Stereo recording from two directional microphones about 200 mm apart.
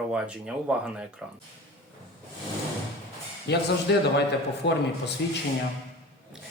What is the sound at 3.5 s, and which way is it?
Speech, 55° left (ahead or behind).